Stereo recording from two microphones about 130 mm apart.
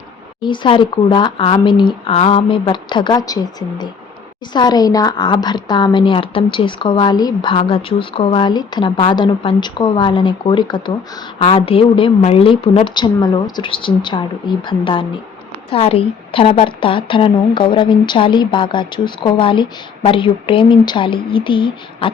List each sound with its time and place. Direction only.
0.4 s a woman's voice: 40° left (ahead or behind)